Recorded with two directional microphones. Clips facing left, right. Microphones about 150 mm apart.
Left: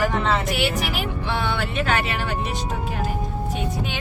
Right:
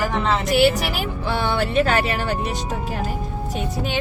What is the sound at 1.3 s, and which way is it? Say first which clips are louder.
Speech: right 5 dB; 40° right (ahead or behind).